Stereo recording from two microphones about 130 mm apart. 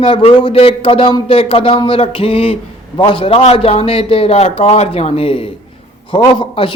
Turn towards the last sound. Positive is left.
turn(degrees=40)  # may be behind; listen again after turning